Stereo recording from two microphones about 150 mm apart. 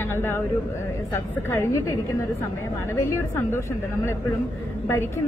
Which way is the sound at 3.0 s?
15° left (ahead or behind).